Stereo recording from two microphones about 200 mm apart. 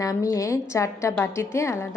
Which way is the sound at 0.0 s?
15° left (ahead or behind).